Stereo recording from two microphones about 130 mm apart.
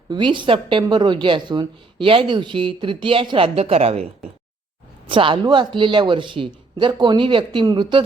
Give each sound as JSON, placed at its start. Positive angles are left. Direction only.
{"t": 0.1, "sound": "a woman's voice", "side_deg": -35}
{"t": 5.0, "sound": "a woman's voice", "side_deg": -40}